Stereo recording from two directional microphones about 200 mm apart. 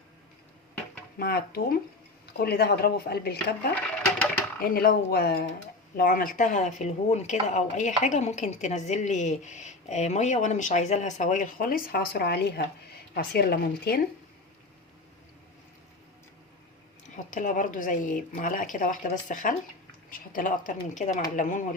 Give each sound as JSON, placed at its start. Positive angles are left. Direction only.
{"t": 1.2, "sound": "speech", "side_deg": 50}
{"t": 17.3, "sound": "speech", "side_deg": 40}